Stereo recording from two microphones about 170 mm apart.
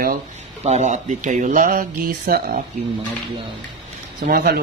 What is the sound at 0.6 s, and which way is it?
Speech, 45° right (ahead or behind).